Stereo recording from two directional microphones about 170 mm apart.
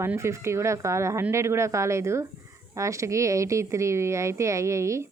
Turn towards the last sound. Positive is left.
turn(degrees=-15)  # may be behind; listen again after turning